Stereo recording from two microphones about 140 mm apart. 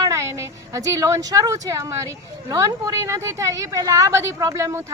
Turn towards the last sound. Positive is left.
turn(degrees=-20)  # may be behind; listen again after turning